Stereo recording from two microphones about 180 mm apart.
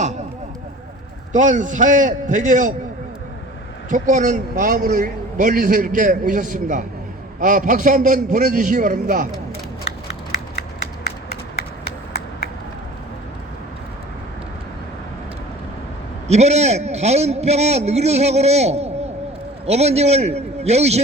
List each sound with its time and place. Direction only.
1.3 s a man's voice: 45° right (ahead or behind)
3.8 s a man's voice: 45° right (ahead or behind)
16.2 s a man's voice: 35° right (ahead or behind)